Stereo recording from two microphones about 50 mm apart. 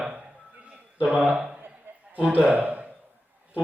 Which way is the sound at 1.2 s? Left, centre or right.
Centre.